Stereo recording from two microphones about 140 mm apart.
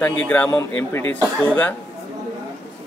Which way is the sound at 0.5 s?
25° left (ahead or behind).